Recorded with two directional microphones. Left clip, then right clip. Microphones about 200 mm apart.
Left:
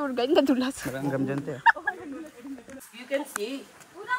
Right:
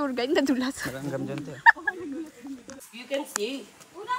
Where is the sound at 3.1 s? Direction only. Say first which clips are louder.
Even; centre (ahead or behind).